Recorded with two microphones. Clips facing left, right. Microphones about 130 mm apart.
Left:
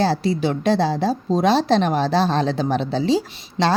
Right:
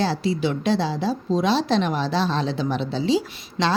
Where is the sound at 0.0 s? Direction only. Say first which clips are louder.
Left 3 dB; 40° left (ahead or behind).